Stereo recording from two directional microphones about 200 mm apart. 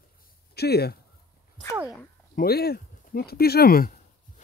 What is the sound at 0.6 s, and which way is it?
Speech, 55° left (ahead or behind).